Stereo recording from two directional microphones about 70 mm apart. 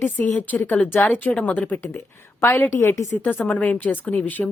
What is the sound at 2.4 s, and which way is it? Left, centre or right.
Speech, left.